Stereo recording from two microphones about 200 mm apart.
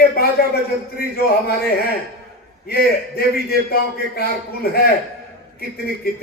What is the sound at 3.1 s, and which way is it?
A man's voice, 50° left (ahead or behind).